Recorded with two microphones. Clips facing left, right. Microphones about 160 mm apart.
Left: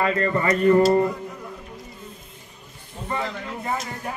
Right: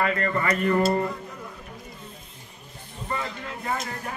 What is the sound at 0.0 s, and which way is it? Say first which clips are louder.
Speech: left 3 dB; 30° left (ahead or behind).